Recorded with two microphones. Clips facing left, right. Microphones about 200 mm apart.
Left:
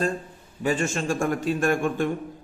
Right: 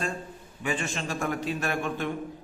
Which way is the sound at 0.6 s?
40° left (ahead or behind).